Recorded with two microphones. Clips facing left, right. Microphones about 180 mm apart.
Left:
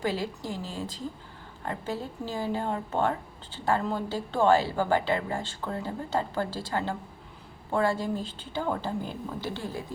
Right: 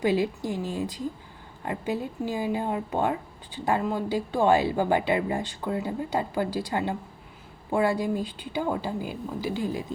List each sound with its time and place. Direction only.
0.0 s a woman's voice: 20° right (ahead or behind)